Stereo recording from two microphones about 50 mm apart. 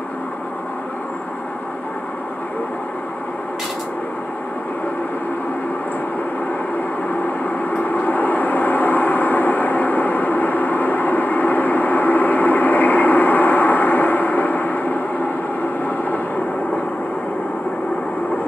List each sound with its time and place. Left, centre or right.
7.4 s vehicle: left